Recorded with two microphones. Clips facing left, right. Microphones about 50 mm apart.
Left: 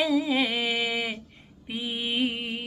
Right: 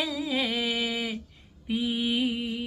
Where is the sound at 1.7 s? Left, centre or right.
Centre.